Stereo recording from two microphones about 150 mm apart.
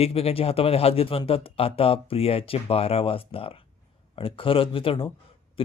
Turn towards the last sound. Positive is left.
turn(degrees=35)  # may be behind; listen again after turning